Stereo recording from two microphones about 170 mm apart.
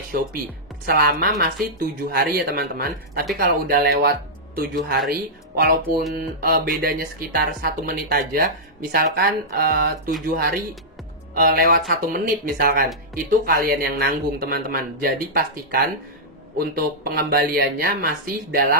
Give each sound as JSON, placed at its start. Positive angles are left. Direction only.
{"t": 0.8, "sound": "speech", "side_deg": -60}
{"t": 6.1, "sound": "speech", "side_deg": -60}